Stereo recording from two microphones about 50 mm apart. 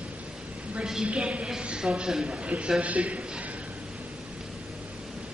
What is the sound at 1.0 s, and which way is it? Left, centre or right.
A woman's voice, right.